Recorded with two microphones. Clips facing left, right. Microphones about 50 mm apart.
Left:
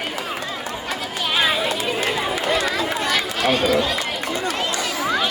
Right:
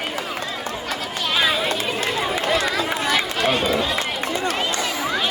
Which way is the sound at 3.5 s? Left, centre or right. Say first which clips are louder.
Left 4 dB; centre.